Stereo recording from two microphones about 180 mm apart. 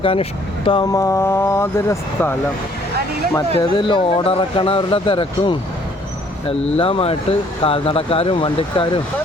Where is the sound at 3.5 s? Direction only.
25° left (ahead or behind).